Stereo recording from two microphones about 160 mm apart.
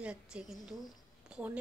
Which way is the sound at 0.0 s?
5° right (ahead or behind).